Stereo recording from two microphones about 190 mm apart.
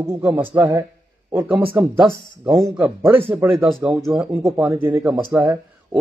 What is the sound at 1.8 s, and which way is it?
Speech, 5° right (ahead or behind).